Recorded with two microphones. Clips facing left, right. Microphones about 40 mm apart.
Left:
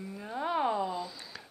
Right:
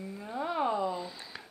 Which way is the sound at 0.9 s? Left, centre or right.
Right.